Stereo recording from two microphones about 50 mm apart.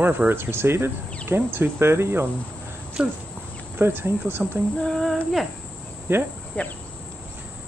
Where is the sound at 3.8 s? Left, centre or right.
Right.